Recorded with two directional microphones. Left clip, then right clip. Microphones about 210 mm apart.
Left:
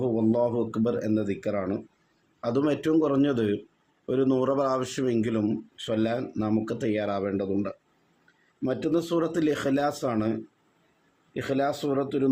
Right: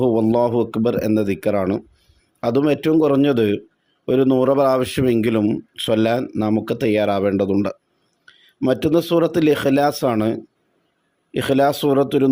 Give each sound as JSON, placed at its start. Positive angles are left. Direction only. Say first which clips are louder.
{"t": 0.0, "sound": "speech", "louder": "right 8 dB", "side_deg": -45}
{"t": 11.3, "sound": "speech", "louder": "right 10 dB", "side_deg": -50}